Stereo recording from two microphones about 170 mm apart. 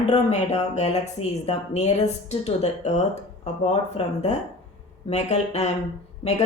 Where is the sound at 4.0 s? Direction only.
35° left (ahead or behind).